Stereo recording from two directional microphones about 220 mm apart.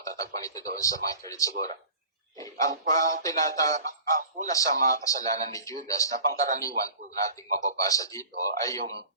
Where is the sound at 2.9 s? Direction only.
35° right (ahead or behind).